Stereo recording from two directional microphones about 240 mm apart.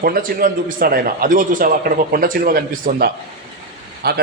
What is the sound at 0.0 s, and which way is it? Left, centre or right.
Speech, right.